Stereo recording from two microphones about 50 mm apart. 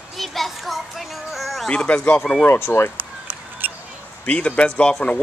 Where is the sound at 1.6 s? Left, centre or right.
Left.